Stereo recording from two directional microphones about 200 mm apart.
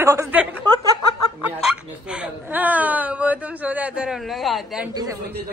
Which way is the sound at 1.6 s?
5° right (ahead or behind).